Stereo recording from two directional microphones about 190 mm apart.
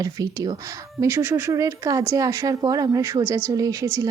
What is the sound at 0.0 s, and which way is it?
A woman's voice, 20° right (ahead or behind).